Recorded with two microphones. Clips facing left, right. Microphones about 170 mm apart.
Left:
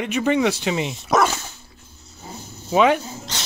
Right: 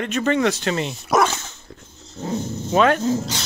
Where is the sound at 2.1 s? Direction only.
90° right.